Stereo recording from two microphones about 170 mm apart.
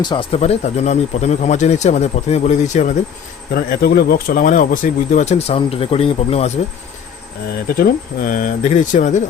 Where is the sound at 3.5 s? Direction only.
65° left (ahead or behind); by 6.5 s 35° left (ahead or behind).